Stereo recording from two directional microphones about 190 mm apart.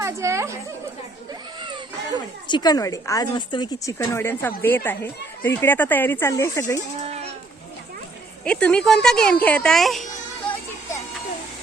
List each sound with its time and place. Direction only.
0.0 s a sound: 15° right (ahead or behind)
2.5 s a woman's voice: 20° left (ahead or behind)
8.4 s speech: 5° left (ahead or behind)